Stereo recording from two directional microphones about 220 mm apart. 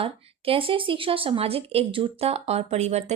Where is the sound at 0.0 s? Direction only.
25° right (ahead or behind).